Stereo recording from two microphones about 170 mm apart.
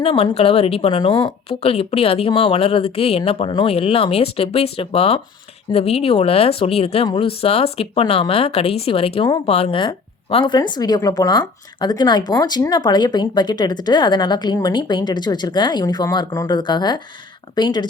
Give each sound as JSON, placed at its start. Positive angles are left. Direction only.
{"t": 0.0, "sound": "a woman's voice", "side_deg": 35}